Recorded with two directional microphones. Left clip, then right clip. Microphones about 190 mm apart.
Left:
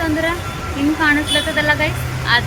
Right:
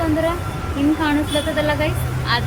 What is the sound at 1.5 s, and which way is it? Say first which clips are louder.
Speech: left 3 dB; 10° right (ahead or behind).